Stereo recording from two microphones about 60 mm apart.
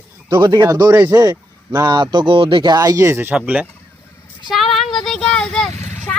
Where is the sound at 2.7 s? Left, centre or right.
Right.